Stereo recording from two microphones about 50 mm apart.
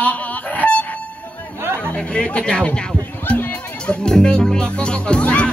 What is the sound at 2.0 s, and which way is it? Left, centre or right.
Speech, left.